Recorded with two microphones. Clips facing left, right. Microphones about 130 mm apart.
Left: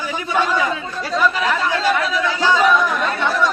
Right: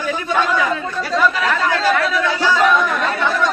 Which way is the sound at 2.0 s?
20° left (ahead or behind).